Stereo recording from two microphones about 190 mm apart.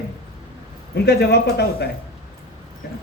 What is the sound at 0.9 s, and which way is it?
Speech, 55° left (ahead or behind).